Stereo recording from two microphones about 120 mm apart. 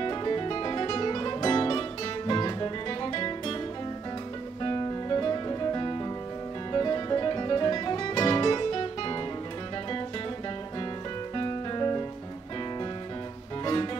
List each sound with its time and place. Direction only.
0.0 s music: 35° left (ahead or behind)
4.6 s guitar: 35° left (ahead or behind)
6.7 s music: 35° left (ahead or behind)
11.3 s music: 30° left (ahead or behind)